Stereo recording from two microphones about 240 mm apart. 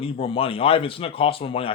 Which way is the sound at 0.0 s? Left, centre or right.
Left.